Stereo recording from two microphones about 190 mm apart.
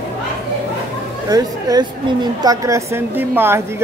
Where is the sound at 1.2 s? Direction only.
20° right (ahead or behind).